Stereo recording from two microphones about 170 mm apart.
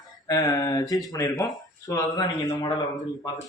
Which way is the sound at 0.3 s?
20° left (ahead or behind).